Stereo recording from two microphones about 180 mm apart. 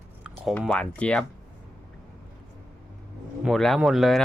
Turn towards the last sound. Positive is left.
turn(degrees=0)  # may be behind; listen again after turning